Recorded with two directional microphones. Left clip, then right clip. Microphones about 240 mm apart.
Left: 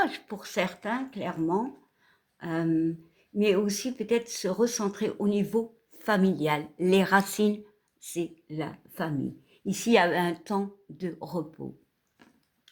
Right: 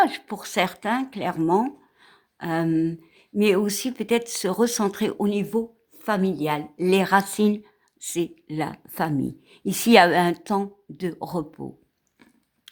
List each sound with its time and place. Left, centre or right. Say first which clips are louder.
0.0 s speech: right 7 dB; right
8.0 s speech: right 6 dB; right
12.7 s typing: right 11 dB; right